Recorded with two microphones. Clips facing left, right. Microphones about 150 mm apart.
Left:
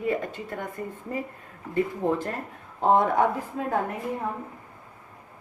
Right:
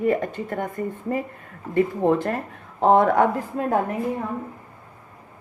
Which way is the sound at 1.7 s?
70° right (ahead or behind).